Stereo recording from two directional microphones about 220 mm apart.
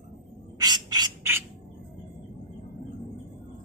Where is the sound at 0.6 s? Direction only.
20° right (ahead or behind).